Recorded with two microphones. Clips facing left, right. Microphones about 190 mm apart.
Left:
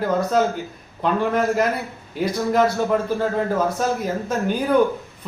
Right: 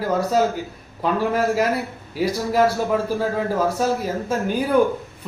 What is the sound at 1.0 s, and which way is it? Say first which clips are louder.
A man's voice: even; 5° right (ahead or behind).